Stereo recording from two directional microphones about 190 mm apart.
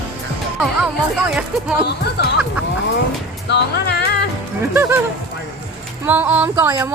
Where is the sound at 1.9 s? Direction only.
60° left (ahead or behind).